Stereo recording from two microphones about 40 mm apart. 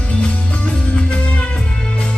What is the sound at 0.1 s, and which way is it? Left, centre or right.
Music, left.